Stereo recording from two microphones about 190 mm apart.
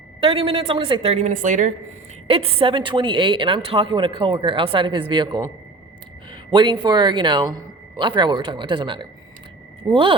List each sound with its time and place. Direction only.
0.2 s a woman's voice: 30° right (ahead or behind)
2.2 s a woman's voice: 30° right (ahead or behind)
6.3 s a sound: 25° right (ahead or behind)
6.8 s a woman's voice: 25° right (ahead or behind)